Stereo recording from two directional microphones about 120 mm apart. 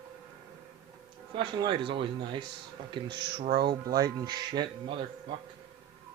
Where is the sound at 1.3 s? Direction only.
45° right (ahead or behind).